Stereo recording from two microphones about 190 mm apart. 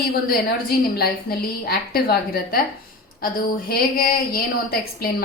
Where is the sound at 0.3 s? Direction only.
55° left (ahead or behind).